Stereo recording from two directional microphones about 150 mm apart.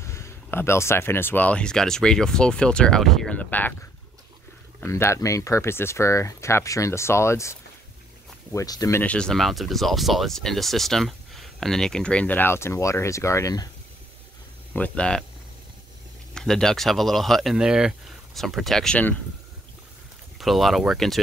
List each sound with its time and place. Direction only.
0.0 s speech: 20° left (ahead or behind)
4.7 s speech: 15° left (ahead or behind)
8.5 s speech: 25° left (ahead or behind)
9.0 s speech: 5° left (ahead or behind)
14.7 s speech: 10° left (ahead or behind)
16.3 s speech: 5° left (ahead or behind)
20.3 s speech: centre (ahead or behind)